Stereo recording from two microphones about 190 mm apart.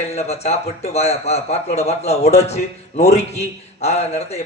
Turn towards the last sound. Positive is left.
turn(degrees=35)  # may be behind; listen again after turning